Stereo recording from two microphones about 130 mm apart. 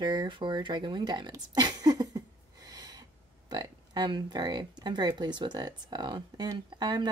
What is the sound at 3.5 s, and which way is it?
Speech, 35° right (ahead or behind).